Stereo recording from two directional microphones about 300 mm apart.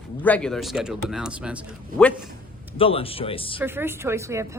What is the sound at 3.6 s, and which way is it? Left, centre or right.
Speech, centre.